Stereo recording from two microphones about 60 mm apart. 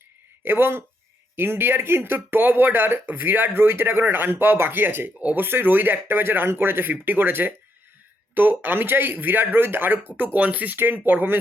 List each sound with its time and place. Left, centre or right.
0.4 s speech: right